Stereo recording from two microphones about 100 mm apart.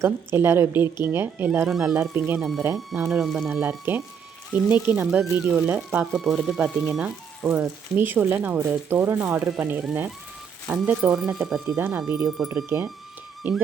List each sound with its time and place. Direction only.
0.0 s speech: 25° right (ahead or behind)
1.6 s speech: 5° right (ahead or behind)
2.1 s speech: 20° right (ahead or behind)
2.4 s speech: 5° right (ahead or behind)
3.5 s speech: 15° right (ahead or behind)
5.2 s speech: 5° right (ahead or behind)
5.5 s speech: 15° right (ahead or behind)
6.1 s speech: centre (ahead or behind)
7.4 s speech: 20° right (ahead or behind)
11.1 s speech: 5° right (ahead or behind)
12.6 s speech: 25° right (ahead or behind)